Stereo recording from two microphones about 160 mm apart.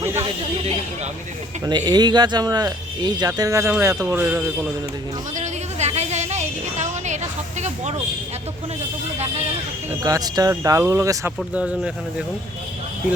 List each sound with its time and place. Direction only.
1.9 s speech: 25° right (ahead or behind); by 4.4 s 10° right (ahead or behind)
5.4 s a sound: 45° right (ahead or behind)
10.0 s speech: 20° right (ahead or behind)
11.5 s speech: 5° right (ahead or behind)